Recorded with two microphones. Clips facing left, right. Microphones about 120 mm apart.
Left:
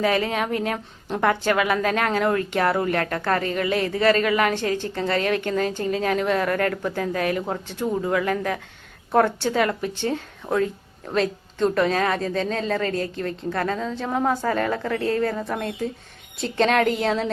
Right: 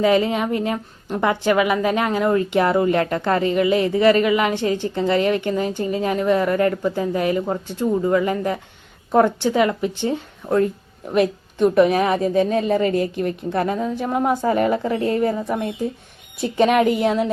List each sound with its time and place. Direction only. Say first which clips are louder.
0.0 s speech: right 5 dB; 15° right (ahead or behind)